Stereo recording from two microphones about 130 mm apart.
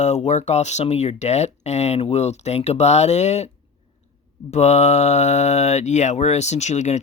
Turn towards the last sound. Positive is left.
turn(degrees=60)  # may be behind; listen again after turning